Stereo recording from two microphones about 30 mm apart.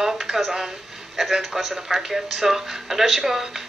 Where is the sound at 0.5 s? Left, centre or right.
Centre.